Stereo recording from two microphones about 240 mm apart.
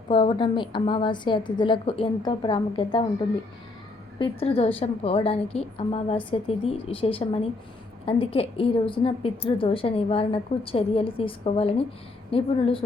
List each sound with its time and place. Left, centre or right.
0.1 s a woman's voice: centre
4.2 s a woman's voice: left